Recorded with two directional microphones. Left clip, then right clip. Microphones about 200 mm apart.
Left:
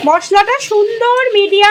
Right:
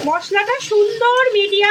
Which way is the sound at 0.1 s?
20° left (ahead or behind).